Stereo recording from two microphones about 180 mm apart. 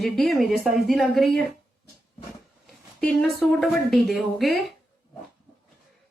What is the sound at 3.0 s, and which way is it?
Speech, centre (ahead or behind).